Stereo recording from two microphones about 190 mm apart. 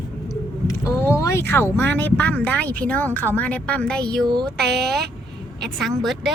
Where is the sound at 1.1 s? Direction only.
15° left (ahead or behind).